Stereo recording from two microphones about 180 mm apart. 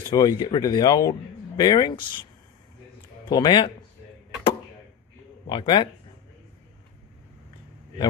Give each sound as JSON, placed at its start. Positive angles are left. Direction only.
{"t": 0.1, "sound": "speech", "side_deg": 20}
{"t": 3.3, "sound": "speech", "side_deg": 25}
{"t": 5.5, "sound": "speech", "side_deg": 25}